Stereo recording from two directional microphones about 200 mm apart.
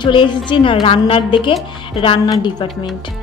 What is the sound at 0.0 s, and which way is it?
A woman's voice, 25° left (ahead or behind).